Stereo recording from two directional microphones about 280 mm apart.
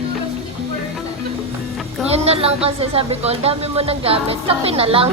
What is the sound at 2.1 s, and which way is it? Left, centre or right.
Speech, right.